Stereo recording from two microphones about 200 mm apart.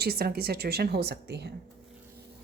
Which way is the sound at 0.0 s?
50° right (ahead or behind).